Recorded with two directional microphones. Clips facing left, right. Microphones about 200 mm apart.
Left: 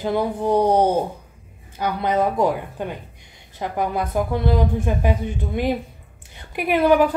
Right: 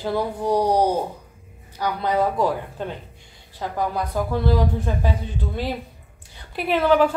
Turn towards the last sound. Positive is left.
turn(degrees=15)  # may be behind; listen again after turning